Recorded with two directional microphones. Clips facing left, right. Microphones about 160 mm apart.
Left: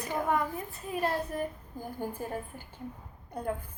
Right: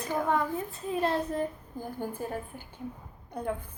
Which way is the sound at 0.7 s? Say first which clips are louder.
Right 2 dB; 25° right (ahead or behind).